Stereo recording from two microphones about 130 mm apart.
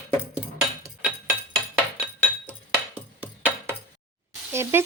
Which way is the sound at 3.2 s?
15° right (ahead or behind).